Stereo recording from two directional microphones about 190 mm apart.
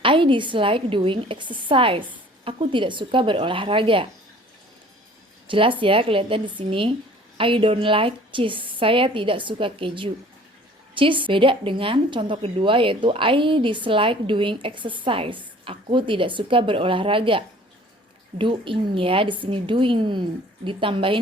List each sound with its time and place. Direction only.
0.0 s a woman's voice: 25° right (ahead or behind)
5.5 s a woman's voice: 25° right (ahead or behind)